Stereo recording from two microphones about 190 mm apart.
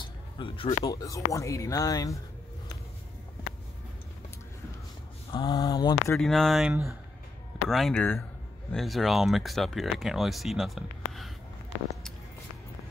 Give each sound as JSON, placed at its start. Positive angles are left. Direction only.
{"t": 0.0, "sound": "speech", "side_deg": 25}
{"t": 5.3, "sound": "speech", "side_deg": 20}
{"t": 6.1, "sound": "speech", "side_deg": 0}